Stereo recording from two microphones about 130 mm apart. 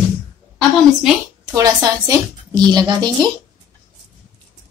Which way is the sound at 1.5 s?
30° right (ahead or behind).